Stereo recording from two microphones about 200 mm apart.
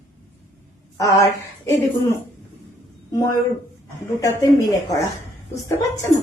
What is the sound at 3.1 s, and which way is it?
A woman's voice, 15° left (ahead or behind).